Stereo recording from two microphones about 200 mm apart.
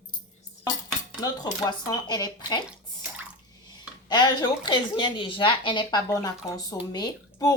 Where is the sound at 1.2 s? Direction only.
20° left (ahead or behind).